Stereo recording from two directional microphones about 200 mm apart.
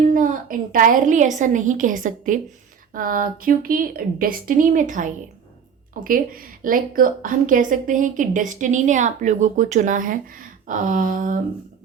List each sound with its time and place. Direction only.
0.0 s a woman's voice: 40° right (ahead or behind)